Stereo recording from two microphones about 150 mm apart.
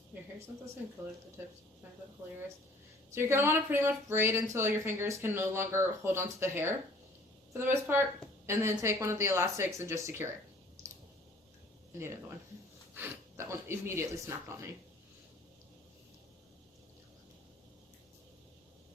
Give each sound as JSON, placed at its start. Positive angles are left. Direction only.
{"t": 3.2, "sound": "speech", "side_deg": -15}
{"t": 12.9, "sound": "speech", "side_deg": -15}